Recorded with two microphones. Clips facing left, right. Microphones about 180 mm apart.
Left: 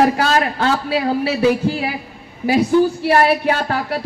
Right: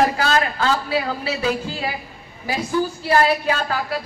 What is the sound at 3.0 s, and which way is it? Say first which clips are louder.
Speech: left 3 dB; 65° left (ahead or behind).